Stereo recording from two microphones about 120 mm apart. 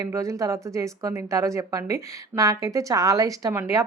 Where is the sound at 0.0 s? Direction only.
25° right (ahead or behind).